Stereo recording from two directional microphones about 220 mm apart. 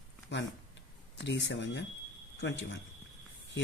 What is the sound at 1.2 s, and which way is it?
Speech, 55° left (ahead or behind).